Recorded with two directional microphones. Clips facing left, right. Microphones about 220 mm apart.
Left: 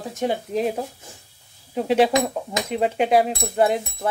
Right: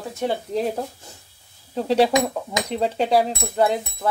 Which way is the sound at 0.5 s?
Centre (ahead or behind).